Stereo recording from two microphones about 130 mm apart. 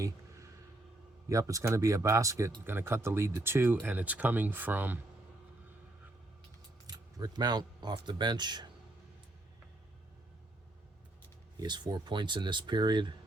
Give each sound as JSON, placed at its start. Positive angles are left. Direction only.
{"t": 1.3, "sound": "speech", "side_deg": -25}
{"t": 6.8, "sound": "keys jangling", "side_deg": -30}
{"t": 7.9, "sound": "speech", "side_deg": -35}
{"t": 11.5, "sound": "speech", "side_deg": -35}